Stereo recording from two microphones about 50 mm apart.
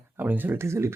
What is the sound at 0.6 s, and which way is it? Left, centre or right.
Speech, right.